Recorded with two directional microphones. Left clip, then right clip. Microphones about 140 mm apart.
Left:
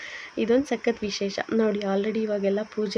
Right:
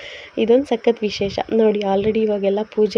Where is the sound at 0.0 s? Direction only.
25° right (ahead or behind).